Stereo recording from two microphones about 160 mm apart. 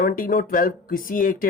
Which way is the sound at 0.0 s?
60° left (ahead or behind).